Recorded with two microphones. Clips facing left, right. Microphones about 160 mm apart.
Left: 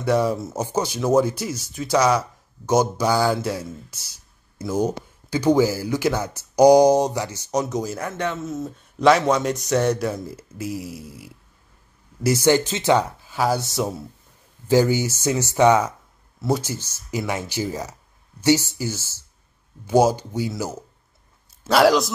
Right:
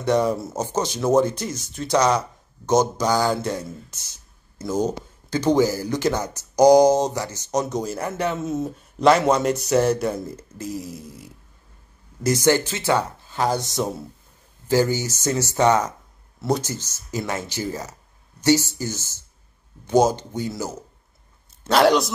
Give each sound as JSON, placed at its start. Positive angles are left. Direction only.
{"t": 0.0, "sound": "speech", "side_deg": 5}
{"t": 4.7, "sound": "speech", "side_deg": 10}
{"t": 6.1, "sound": "speech", "side_deg": -15}
{"t": 6.5, "sound": "speech", "side_deg": 15}
{"t": 10.6, "sound": "speech", "side_deg": 10}
{"t": 12.4, "sound": "speech", "side_deg": 20}
{"t": 13.4, "sound": "speech", "side_deg": 5}